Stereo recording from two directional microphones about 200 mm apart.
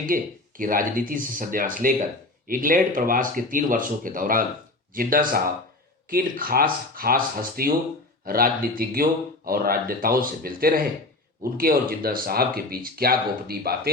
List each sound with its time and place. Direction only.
0.0 s speech: 45° right (ahead or behind)